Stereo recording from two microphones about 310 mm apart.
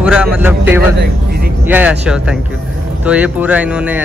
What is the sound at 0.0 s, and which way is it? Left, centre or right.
Speech, centre.